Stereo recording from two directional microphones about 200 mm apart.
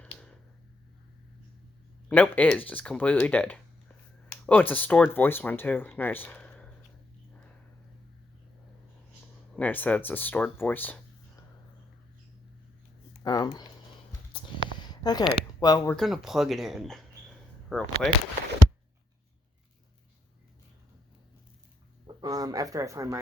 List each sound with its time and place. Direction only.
2.0 s speech: 5° left (ahead or behind)
9.6 s speech: 10° left (ahead or behind)
13.2 s a sound: 20° left (ahead or behind)
15.6 s speech: 20° left (ahead or behind)
16.0 s speech: centre (ahead or behind)
22.0 s a sound: 20° right (ahead or behind)